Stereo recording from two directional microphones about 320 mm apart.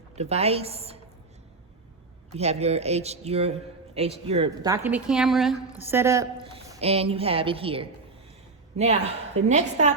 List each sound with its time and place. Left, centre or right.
0.2 s a woman's voice: centre
2.3 s a woman's voice: centre